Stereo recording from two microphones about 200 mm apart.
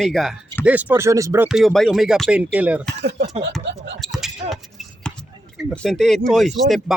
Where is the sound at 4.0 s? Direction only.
Centre (ahead or behind).